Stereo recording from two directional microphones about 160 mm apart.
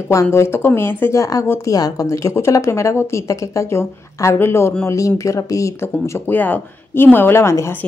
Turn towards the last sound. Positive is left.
turn(degrees=15)  # may be behind; listen again after turning